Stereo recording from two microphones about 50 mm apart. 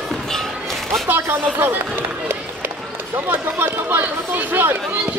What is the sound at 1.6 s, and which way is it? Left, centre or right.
Run, right.